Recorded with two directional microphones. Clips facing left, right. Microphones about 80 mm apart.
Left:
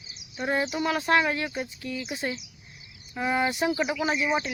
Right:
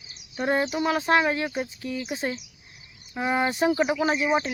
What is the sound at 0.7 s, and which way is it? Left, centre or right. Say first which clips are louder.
Speech: left 1 dB; right.